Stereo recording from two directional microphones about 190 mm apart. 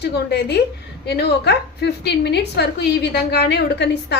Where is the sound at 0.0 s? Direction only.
60° left (ahead or behind).